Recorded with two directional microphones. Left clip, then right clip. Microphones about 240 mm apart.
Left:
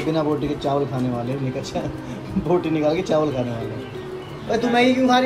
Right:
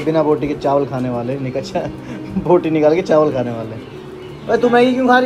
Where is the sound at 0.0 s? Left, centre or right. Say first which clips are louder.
Right 7 dB; right.